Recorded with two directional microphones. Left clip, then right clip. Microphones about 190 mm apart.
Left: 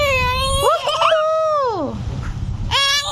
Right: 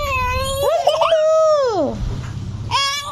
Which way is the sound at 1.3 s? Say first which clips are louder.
Right 3 dB; centre (ahead or behind).